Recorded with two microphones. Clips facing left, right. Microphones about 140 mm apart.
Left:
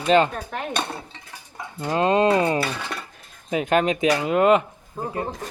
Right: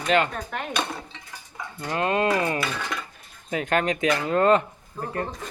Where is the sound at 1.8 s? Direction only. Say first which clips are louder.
Left 5 dB; 20° left (ahead or behind).